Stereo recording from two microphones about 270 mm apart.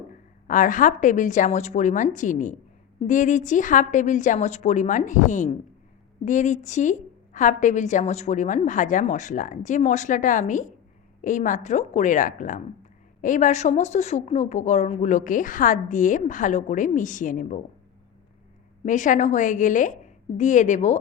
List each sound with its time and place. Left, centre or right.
0.4 s speech: left
18.9 s speech: left